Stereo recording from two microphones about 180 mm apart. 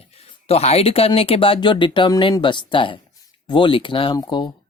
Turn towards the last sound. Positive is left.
turn(degrees=25)  # may be behind; listen again after turning